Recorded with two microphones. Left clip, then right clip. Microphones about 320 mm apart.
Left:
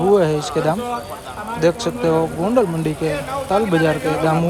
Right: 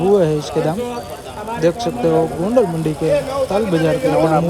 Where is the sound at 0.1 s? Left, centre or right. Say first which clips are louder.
Right 1 dB; centre.